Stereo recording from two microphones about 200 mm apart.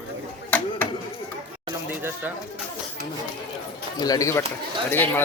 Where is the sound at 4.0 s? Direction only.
15° left (ahead or behind).